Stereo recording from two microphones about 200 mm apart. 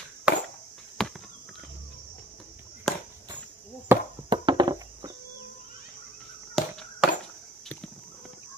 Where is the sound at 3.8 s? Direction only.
20° right (ahead or behind).